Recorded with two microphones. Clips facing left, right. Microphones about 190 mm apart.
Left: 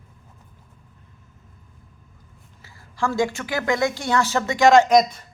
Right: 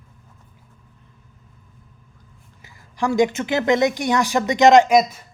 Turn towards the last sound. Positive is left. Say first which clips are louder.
# even
turn(degrees=-5)  # may be behind; listen again after turning